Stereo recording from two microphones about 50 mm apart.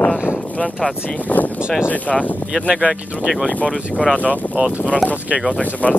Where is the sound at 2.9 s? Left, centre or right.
Right.